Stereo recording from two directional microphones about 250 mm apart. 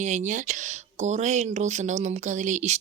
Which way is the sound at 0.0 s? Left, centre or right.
Right.